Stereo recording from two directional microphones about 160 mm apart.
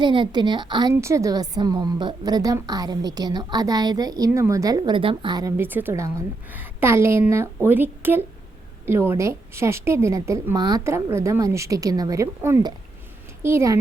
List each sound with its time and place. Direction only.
0.0 s a woman's voice: 30° right (ahead or behind)